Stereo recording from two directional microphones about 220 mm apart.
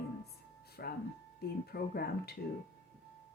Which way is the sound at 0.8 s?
45° left (ahead or behind).